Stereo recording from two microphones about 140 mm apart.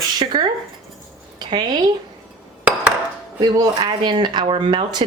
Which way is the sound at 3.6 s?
30° right (ahead or behind).